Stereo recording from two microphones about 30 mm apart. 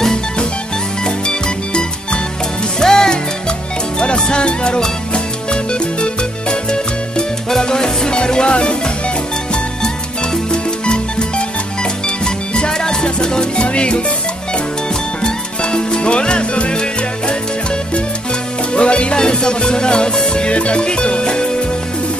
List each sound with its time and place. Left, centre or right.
1.0 s music: left
4.0 s music: left
10.5 s music: left
13.6 s music: left
15.2 s music: left
18.7 s music: left
19.1 s music: left